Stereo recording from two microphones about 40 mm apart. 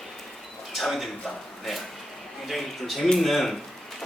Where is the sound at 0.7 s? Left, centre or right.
Centre.